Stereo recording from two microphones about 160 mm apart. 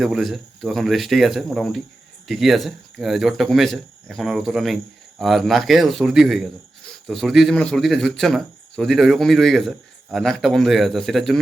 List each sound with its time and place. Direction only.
0.0 s speech: centre (ahead or behind)